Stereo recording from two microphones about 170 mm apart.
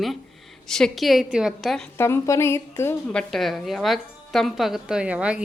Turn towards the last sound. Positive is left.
turn(degrees=-5)  # may be behind; listen again after turning